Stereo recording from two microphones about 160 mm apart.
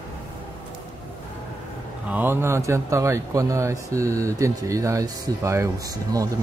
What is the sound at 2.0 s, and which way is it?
Speech, 10° right (ahead or behind).